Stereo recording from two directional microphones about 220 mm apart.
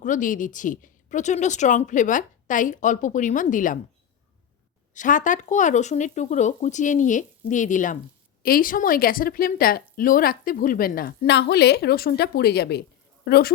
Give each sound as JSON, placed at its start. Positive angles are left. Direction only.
{"t": 0.0, "sound": "speech", "side_deg": 35}
{"t": 4.9, "sound": "a woman's voice", "side_deg": 35}